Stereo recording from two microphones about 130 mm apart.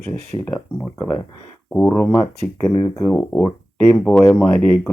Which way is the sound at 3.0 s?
10° left (ahead or behind).